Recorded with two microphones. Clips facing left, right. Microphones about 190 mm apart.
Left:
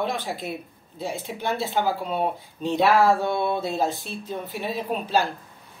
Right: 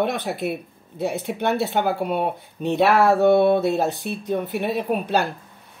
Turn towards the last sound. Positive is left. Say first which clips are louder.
# right 3 dB
turn(degrees=-65)  # may be behind; listen again after turning